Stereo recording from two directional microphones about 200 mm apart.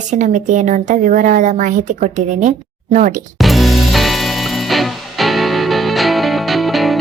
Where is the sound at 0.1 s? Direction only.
40° right (ahead or behind).